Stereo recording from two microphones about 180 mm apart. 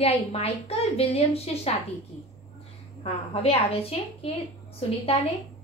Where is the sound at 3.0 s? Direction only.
35° left (ahead or behind).